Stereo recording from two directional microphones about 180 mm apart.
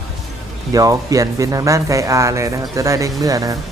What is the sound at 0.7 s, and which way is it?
Speech, 20° right (ahead or behind).